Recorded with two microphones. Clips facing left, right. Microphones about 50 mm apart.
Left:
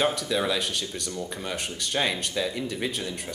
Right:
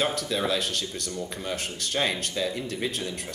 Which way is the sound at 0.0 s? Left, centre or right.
Centre.